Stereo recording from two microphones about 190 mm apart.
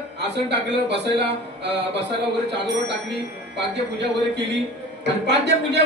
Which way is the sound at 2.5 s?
65° right (ahead or behind).